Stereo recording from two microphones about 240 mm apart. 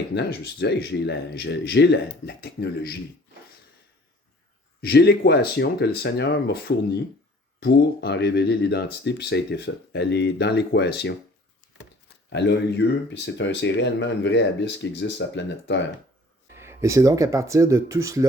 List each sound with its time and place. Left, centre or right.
0.1 s speech: left
4.8 s speech: left
11.8 s a sound: left
13.2 s speech: left
16.6 s speech: centre